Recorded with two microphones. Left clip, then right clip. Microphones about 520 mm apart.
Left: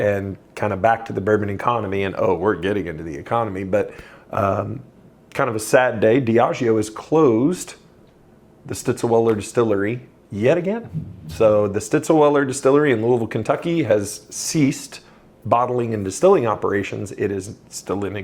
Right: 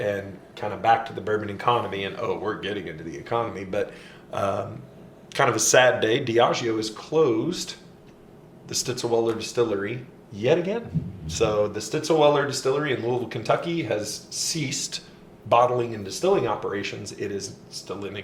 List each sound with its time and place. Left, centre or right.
0.0 s speech: left
8.9 s speech: left
17.3 s speech: left